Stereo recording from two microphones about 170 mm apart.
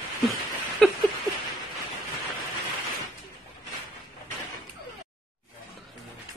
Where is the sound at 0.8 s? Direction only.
5° left (ahead or behind).